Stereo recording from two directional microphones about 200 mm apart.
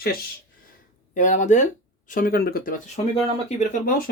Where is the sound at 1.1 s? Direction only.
40° left (ahead or behind).